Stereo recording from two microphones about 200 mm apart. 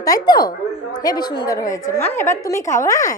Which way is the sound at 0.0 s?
20° left (ahead or behind).